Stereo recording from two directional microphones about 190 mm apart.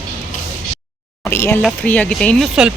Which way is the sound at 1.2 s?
10° left (ahead or behind).